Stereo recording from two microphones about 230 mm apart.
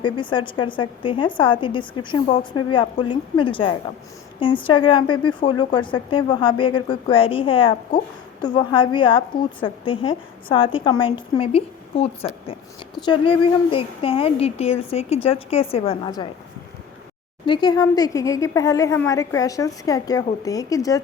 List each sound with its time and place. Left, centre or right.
0.0 s a woman's voice: left
17.4 s speech: centre